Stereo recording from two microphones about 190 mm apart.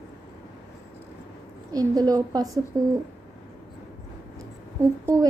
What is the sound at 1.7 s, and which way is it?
Speech, 20° right (ahead or behind).